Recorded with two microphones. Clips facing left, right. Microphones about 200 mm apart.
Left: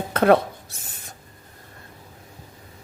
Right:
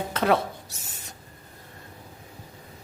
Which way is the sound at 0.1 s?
55° left (ahead or behind).